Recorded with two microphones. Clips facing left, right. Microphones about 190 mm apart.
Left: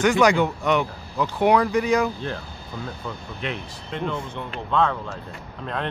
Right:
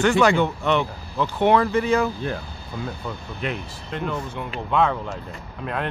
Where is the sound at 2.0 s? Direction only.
5° right (ahead or behind).